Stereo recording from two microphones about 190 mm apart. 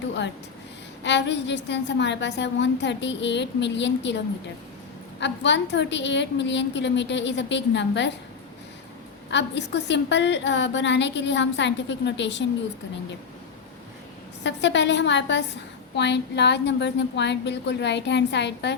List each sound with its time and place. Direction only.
1.0 s a woman's voice: 65° left (ahead or behind)
5.2 s a woman's voice: 70° left (ahead or behind)
9.3 s a woman's voice: 65° left (ahead or behind)
14.4 s a woman's voice: 65° left (ahead or behind)